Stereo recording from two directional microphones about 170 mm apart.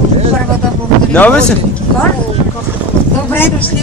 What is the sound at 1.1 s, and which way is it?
Speech, 10° left (ahead or behind).